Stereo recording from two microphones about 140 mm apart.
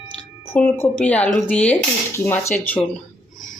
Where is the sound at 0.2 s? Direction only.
15° left (ahead or behind).